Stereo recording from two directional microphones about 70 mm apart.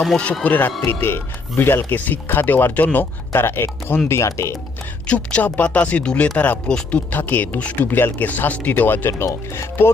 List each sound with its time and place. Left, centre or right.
0.4 s speech: left
5.0 s speech: centre
7.1 s speech: left